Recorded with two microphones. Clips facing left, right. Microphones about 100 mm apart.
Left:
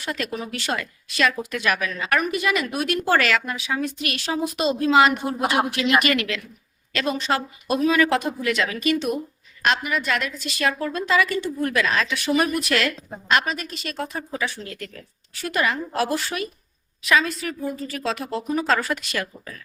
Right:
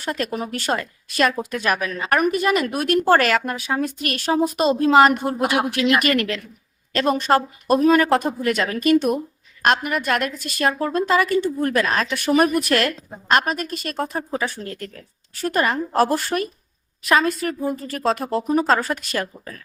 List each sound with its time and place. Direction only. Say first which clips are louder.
0.0 s a woman's voice: right 3 dB; 40° right (ahead or behind)
5.1 s speech: right 2 dB; centre (ahead or behind)
6.1 s a woman's voice: right 3 dB; 40° right (ahead or behind)